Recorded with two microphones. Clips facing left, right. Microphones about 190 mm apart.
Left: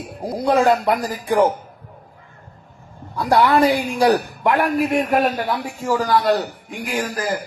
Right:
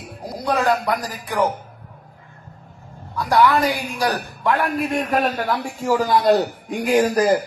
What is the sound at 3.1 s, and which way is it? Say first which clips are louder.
Speech: left 1 dB; 30° left (ahead or behind).